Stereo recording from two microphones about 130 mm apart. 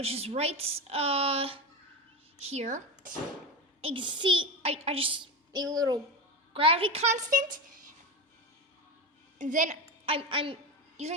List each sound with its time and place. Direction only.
0.0 s a woman's voice: 50° right (ahead or behind); by 3.2 s 80° right
3.8 s a child's voice: 45° right (ahead or behind)
5.5 s a child's voice: 30° right (ahead or behind)
6.5 s a woman's voice: 45° right (ahead or behind); by 7.9 s 90° right
9.4 s a woman's voice: 75° right (ahead or behind)
10.1 s a woman's voice: 45° right (ahead or behind)